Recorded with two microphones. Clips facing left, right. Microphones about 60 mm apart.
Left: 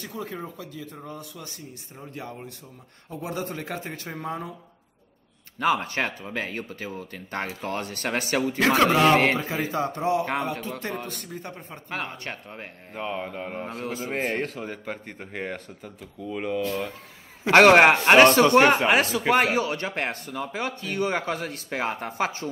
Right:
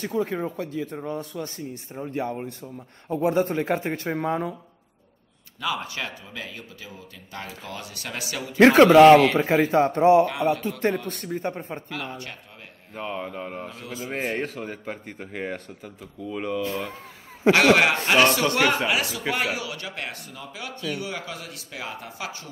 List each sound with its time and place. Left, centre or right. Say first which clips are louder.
0.0 s speech: right 8 dB; right
2.0 s speech: right 9 dB; right
5.6 s speech: left 5 dB; left
8.5 s speech: right 9 dB; right
9.1 s a man's voice: right 5 dB; left
9.4 s speech: right 8 dB; right
11.9 s a man's voice: left 1 dB; left
13.0 s speech: even; centre
13.8 s a man's voice: left 3 dB; left
14.1 s speech: right 1 dB; centre
17.5 s a man's voice: left 3 dB; left